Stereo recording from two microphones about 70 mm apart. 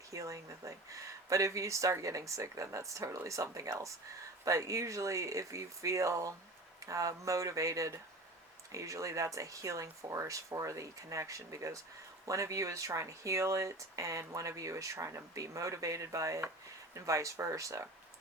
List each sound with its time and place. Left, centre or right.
0.1 s speech: right